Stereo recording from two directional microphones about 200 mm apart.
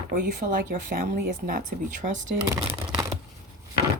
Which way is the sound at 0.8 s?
45° right (ahead or behind).